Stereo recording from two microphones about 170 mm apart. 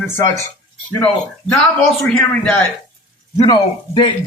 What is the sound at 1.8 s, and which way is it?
Speech, 5° left (ahead or behind).